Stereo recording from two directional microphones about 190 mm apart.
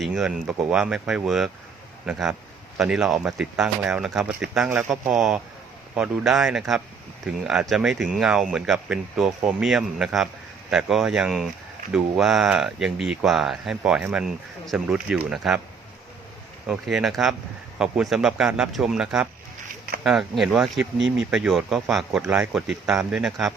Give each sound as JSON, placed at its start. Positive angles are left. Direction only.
{"t": 0.0, "sound": "speech", "side_deg": 0}
{"t": 16.6, "sound": "speech", "side_deg": 0}